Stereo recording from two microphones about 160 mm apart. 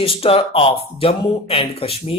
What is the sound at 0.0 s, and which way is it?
Speech, 35° left (ahead or behind).